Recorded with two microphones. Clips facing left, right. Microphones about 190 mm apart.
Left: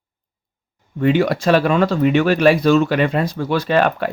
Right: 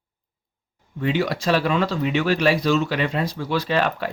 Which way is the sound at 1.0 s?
55° left (ahead or behind).